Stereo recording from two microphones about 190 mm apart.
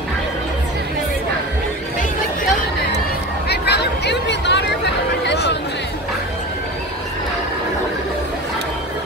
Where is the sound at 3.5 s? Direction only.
60° left (ahead or behind).